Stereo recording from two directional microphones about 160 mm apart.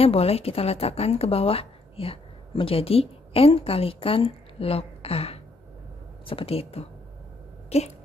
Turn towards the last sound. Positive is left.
turn(degrees=40)  # may be behind; listen again after turning